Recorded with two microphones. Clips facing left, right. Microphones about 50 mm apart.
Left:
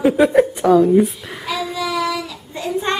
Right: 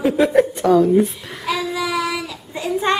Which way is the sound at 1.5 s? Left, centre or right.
Centre.